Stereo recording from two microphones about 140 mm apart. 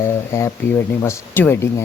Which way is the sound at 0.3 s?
20° left (ahead or behind).